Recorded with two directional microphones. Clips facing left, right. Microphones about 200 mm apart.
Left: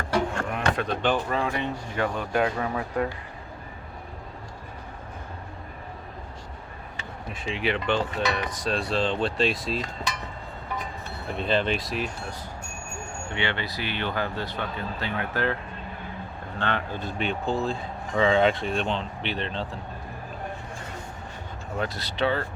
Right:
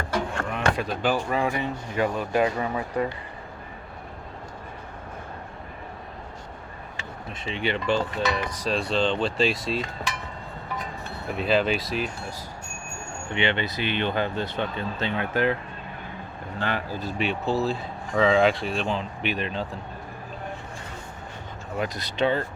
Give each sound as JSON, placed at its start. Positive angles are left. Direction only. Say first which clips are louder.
{"t": 0.6, "sound": "speech", "louder": "right 1 dB", "side_deg": -5}
{"t": 7.3, "sound": "speech", "louder": "even", "side_deg": 0}
{"t": 11.3, "sound": "speech", "louder": "right 2 dB", "side_deg": -5}
{"t": 13.3, "sound": "speech", "louder": "right 4 dB", "side_deg": -20}
{"t": 16.6, "sound": "speech", "louder": "even", "side_deg": -5}
{"t": 21.8, "sound": "speech", "louder": "right 2 dB", "side_deg": -15}